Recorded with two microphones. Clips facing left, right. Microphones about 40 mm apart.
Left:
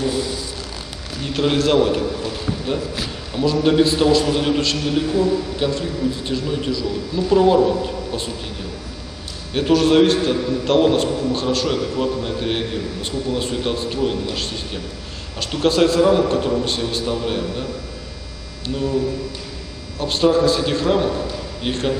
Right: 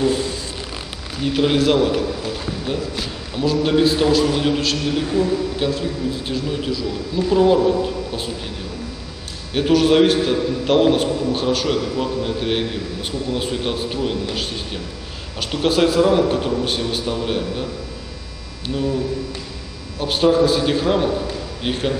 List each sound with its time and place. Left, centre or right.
0.0 s a sound: right
1.2 s a man's voice: centre
9.5 s a man's voice: centre
20.0 s a man's voice: centre